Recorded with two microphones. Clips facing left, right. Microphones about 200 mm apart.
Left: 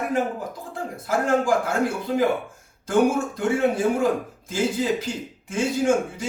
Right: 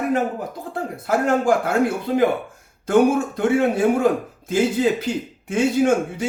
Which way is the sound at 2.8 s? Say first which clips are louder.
Right 4 dB; 60° right (ahead or behind).